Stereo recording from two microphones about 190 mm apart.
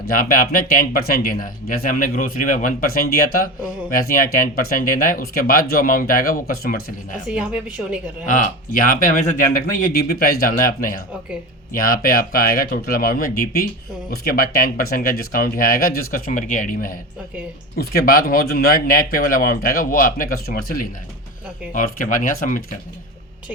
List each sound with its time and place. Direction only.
0.1 s speech: 50° left (ahead or behind)
7.3 s a woman's voice: 5° right (ahead or behind)
8.3 s speech: 45° left (ahead or behind)